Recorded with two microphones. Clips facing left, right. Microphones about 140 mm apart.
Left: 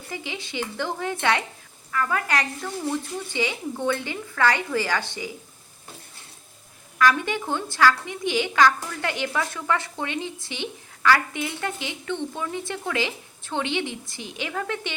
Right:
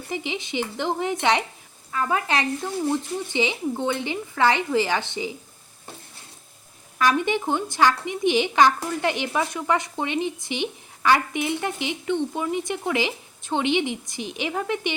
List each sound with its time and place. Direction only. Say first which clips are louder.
0.1 s speech: right 5 dB; 20° right (ahead or behind)
7.0 s speech: right 1 dB; 20° right (ahead or behind)